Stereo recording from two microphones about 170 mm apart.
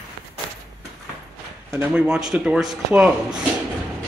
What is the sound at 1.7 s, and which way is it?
Speech, 10° right (ahead or behind).